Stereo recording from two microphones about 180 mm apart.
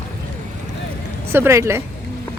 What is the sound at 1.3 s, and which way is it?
Speech, 15° right (ahead or behind).